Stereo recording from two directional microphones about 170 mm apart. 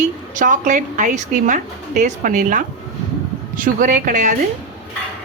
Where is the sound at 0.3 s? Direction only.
50° right (ahead or behind).